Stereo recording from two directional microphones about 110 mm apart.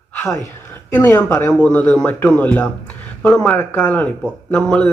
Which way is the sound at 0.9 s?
20° left (ahead or behind).